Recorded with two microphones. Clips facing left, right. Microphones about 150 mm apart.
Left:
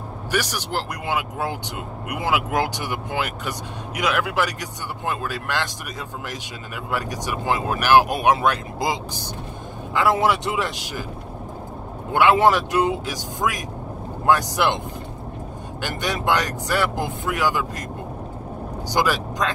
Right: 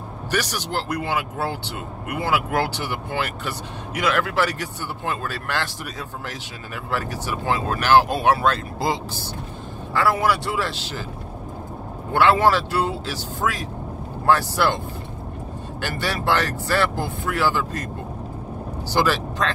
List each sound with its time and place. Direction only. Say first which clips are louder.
0.3 s speech: even; 10° left (ahead or behind)
12.1 s speech: left 1 dB; 15° left (ahead or behind)
16.0 s speech: even; 15° left (ahead or behind)
18.9 s speech: right 1 dB; 15° left (ahead or behind)